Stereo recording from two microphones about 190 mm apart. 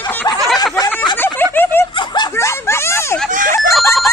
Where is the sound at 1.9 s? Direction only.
25° left (ahead or behind).